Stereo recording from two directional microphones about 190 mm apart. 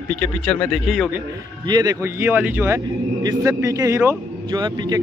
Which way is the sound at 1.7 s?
20° right (ahead or behind).